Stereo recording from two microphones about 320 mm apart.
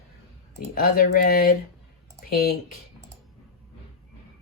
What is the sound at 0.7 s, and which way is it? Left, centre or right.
Speech, left.